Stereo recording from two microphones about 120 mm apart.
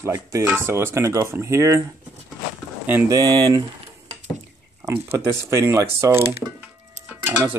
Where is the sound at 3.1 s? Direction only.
35° right (ahead or behind).